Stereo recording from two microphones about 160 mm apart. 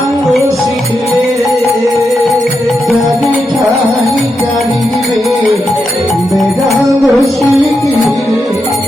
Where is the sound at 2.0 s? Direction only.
20° right (ahead or behind).